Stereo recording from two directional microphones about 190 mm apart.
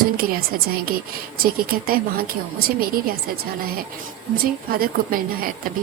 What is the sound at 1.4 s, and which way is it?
A woman's voice, 50° right (ahead or behind).